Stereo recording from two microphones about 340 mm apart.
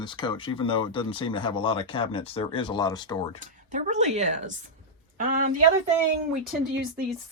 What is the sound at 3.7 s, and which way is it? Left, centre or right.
Speech, centre.